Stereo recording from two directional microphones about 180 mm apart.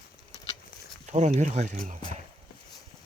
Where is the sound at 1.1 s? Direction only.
40° right (ahead or behind).